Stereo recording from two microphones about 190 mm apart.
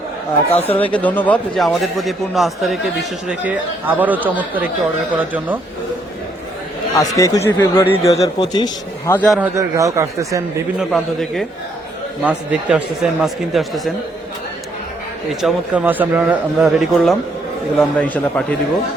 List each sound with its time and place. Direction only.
0.7 s speech: 10° left (ahead or behind); by 5.5 s 10° right (ahead or behind)
6.9 s a man's voice: 15° left (ahead or behind)
9.1 s speech: 5° left (ahead or behind)
9.4 s speech: 15° right (ahead or behind)
10.8 s speech: centre (ahead or behind)
15.3 s speech: centre (ahead or behind)